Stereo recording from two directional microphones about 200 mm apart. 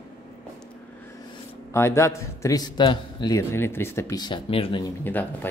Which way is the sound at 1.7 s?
15° left (ahead or behind).